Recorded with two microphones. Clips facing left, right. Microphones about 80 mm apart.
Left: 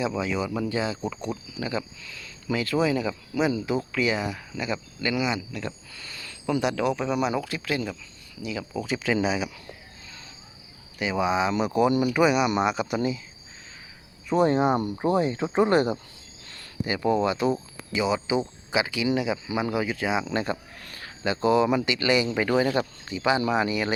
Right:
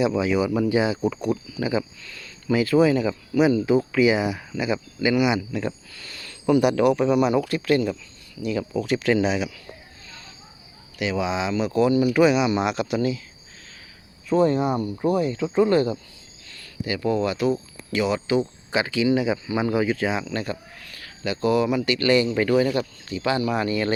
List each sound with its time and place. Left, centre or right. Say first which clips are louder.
0.0 s speech: right 6 dB; centre
5.9 s a sound: even; centre
6.4 s speech: right 7 dB; centre
11.0 s speech: even; centre
13.0 s speech: right 3 dB; centre
14.3 s speech: right 1 dB; left
17.5 s speech: right 3 dB; centre
20.2 s speech: left 1 dB; left
20.7 s a sound: even; left
21.0 s speech: even; left